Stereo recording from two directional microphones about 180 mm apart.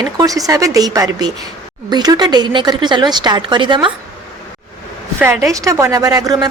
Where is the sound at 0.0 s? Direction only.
20° right (ahead or behind).